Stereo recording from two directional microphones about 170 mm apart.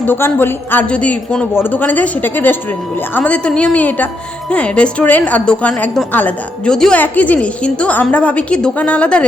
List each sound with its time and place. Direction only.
0.0 s a woman's voice: 10° left (ahead or behind)